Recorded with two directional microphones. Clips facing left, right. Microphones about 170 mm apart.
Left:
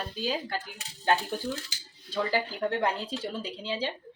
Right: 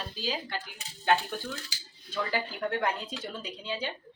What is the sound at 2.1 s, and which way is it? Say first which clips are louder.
Speech: left 3 dB; 30° left (ahead or behind).